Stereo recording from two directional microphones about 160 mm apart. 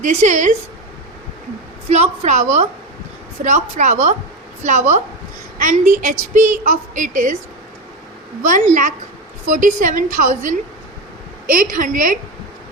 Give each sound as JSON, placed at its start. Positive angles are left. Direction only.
{"t": 0.0, "sound": "a woman's voice", "side_deg": -50}
{"t": 1.9, "sound": "a woman's voice", "side_deg": -45}
{"t": 8.4, "sound": "a woman's voice", "side_deg": -55}